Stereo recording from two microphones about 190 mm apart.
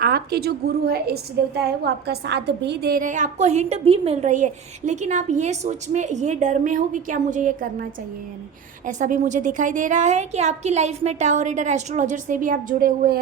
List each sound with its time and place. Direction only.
0.0 s a woman's voice: 55° right (ahead or behind)
8.9 s a woman's voice: 40° right (ahead or behind)